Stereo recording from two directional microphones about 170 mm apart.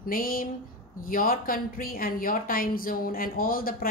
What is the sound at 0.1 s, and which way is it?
A woman's voice, 55° left (ahead or behind).